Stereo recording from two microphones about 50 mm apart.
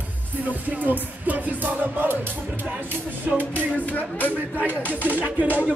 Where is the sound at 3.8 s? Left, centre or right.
Left.